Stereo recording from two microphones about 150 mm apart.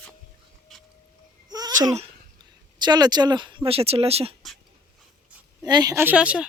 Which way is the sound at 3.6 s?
40° right (ahead or behind).